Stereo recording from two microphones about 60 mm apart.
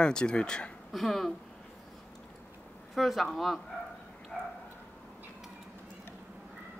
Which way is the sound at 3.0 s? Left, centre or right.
Centre.